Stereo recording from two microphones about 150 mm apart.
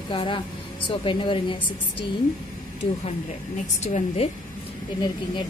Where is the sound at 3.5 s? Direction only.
50° left (ahead or behind).